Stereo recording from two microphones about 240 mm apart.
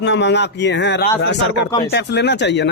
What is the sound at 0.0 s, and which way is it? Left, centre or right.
Speech, left.